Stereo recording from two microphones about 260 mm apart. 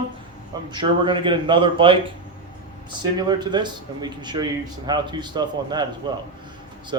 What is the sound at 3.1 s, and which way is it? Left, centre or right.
A man's voice, centre.